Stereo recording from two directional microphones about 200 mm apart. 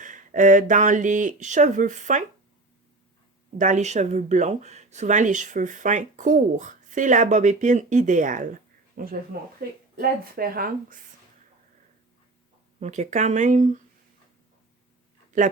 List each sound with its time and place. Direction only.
0.0 s speech: 40° right (ahead or behind)
3.6 s speech: 35° right (ahead or behind)
12.8 s speech: 35° right (ahead or behind)